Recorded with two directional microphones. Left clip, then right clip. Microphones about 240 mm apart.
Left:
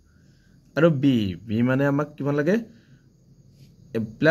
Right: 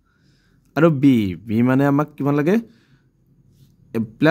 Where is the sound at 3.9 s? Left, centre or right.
Right.